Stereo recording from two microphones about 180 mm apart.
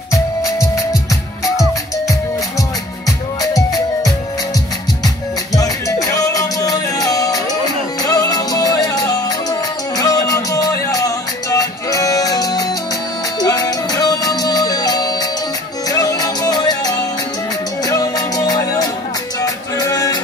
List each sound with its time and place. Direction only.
3.5 s music: 20° left (ahead or behind)
5.5 s music: 20° left (ahead or behind)